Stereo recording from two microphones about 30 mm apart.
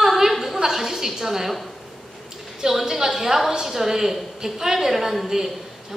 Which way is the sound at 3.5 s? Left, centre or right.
Centre.